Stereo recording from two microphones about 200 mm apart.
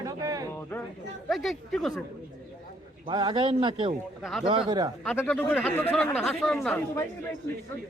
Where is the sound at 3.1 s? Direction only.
20° right (ahead or behind).